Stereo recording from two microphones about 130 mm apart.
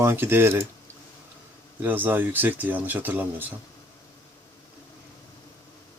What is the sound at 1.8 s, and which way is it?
Speech, 15° right (ahead or behind).